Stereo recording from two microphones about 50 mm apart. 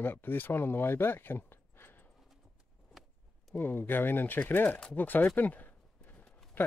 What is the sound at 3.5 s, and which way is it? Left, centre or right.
Speech, left.